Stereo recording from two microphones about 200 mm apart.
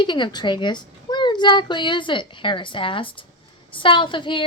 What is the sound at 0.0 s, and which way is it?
A child's voice, 25° left (ahead or behind).